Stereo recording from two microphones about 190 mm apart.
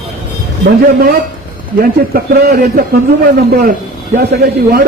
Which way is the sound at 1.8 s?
55° right (ahead or behind).